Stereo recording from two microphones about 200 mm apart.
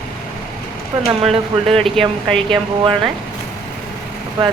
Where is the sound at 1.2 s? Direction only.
Centre (ahead or behind).